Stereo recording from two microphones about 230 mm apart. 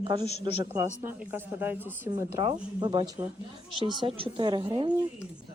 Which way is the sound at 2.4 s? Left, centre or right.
Centre.